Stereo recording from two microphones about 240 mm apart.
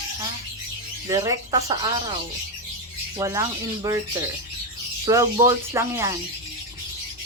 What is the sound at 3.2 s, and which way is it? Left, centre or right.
Speech, centre.